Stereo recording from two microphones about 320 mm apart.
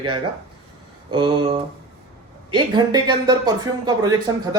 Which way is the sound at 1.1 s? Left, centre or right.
Centre.